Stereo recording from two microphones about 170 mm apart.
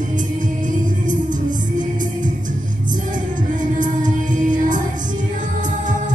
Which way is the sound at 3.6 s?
50° right (ahead or behind).